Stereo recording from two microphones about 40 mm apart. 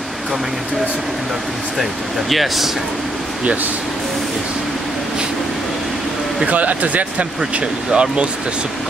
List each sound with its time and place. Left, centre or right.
1.8 s speech: centre
6.5 s speech: right
7.9 s speech: right